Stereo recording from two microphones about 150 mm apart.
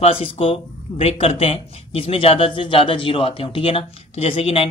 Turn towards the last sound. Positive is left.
turn(degrees=40)  # may be behind; listen again after turning